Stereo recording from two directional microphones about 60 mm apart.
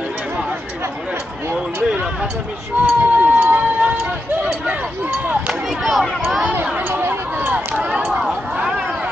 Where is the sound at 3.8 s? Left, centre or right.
Right.